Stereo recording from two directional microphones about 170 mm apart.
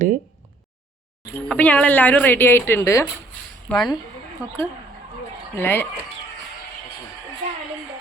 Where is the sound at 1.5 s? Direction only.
5° left (ahead or behind).